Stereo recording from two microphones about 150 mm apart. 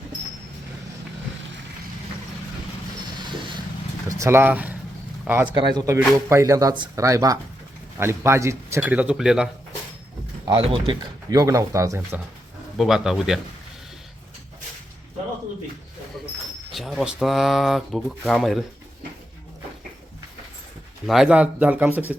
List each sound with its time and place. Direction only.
4.2 s a man's voice: 15° right (ahead or behind)
5.5 s a man's voice: 30° right (ahead or behind); by 9.5 s 5° right (ahead or behind)
10.4 s speech: 30° right (ahead or behind)
11.3 s speech: 20° right (ahead or behind)
12.7 s speech: centre (ahead or behind)
16.7 s speech: centre (ahead or behind)
21.1 s a man's voice: 5° right (ahead or behind)